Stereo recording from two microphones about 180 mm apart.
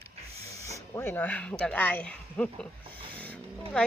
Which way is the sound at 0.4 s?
15° left (ahead or behind).